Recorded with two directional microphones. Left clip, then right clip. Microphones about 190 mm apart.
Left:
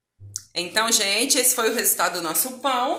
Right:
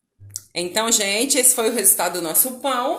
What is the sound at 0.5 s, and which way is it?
A woman's voice, 45° right (ahead or behind).